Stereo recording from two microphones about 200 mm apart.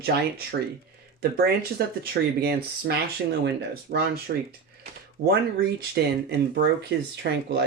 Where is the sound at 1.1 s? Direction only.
50° right (ahead or behind).